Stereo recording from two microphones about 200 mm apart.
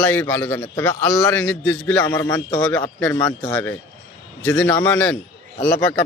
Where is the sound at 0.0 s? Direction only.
5° left (ahead or behind).